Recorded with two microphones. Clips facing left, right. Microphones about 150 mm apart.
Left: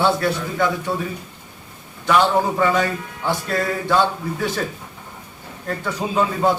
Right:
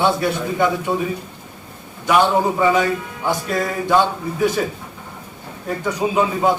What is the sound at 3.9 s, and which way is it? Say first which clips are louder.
Speech: right 3 dB; 15° right (ahead or behind).